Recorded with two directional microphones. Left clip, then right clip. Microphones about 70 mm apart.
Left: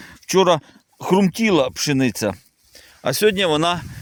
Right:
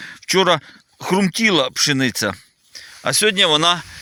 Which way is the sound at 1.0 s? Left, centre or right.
Left.